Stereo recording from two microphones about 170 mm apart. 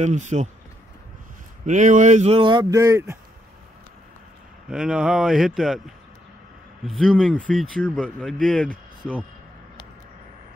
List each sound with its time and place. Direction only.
0.0 s speech: 45° right (ahead or behind)
1.7 s speech: 45° right (ahead or behind); by 3.2 s 15° right (ahead or behind)
4.6 s speech: 5° right (ahead or behind)
6.9 s speech: centre (ahead or behind)